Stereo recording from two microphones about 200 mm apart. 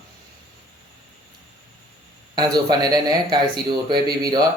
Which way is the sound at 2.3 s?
20° right (ahead or behind).